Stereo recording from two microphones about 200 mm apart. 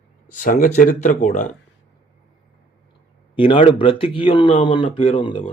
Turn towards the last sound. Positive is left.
turn(degrees=25)  # may be behind; listen again after turning